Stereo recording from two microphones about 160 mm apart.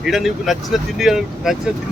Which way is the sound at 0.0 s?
Centre (ahead or behind).